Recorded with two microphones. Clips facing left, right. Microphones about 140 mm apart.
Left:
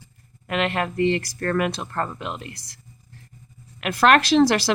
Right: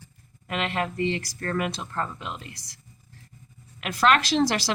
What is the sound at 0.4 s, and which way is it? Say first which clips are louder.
Speech: left 4 dB; 60° left (ahead or behind).